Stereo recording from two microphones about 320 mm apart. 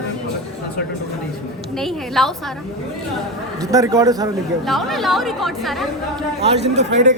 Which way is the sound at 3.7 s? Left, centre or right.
Centre.